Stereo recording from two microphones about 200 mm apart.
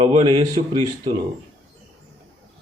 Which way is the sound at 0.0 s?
25° right (ahead or behind).